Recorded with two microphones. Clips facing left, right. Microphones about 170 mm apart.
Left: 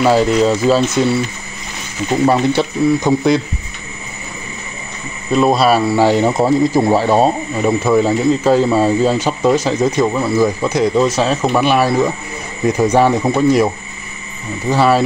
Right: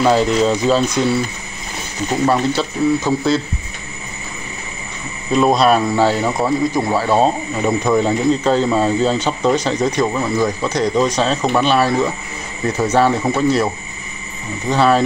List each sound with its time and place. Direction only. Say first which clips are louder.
0.0 s speech: left 2 dB; 5° left (ahead or behind)
2.2 s speech: left 3 dB; 15° left (ahead or behind)
5.3 s speech: left 1 dB; centre (ahead or behind)
6.2 s speech: left 4 dB; 25° left (ahead or behind)
7.2 s speech: left 2 dB; 10° left (ahead or behind)
14.7 s speech: left 1 dB; 10° left (ahead or behind)